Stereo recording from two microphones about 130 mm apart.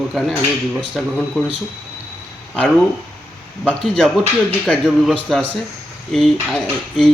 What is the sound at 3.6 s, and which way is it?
Speech, 5° left (ahead or behind).